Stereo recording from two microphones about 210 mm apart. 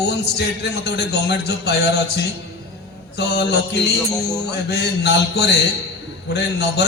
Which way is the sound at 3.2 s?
55° left (ahead or behind).